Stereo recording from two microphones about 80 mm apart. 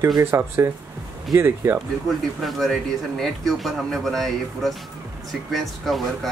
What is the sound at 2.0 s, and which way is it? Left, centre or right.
Speech, centre.